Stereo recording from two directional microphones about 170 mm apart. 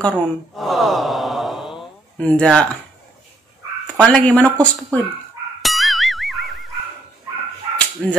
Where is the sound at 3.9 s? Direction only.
5° left (ahead or behind).